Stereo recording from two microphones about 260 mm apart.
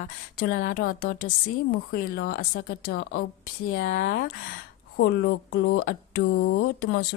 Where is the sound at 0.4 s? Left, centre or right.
Left.